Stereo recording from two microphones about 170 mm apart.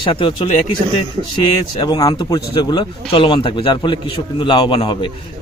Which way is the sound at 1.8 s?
25° left (ahead or behind).